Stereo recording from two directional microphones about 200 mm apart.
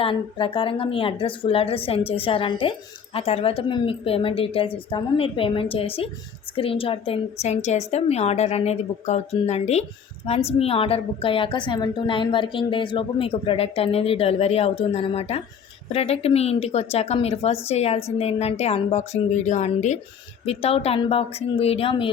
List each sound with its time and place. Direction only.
0.0 s a woman's voice: 25° left (ahead or behind)